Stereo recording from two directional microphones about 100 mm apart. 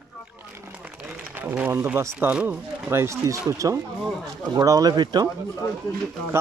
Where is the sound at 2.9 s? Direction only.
30° right (ahead or behind); by 5.2 s 45° right (ahead or behind).